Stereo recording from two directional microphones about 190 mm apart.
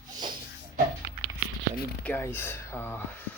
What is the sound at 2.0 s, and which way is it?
Speech, 10° left (ahead or behind).